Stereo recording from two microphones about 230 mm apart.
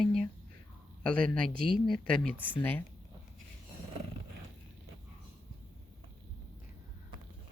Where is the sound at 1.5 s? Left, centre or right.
Right.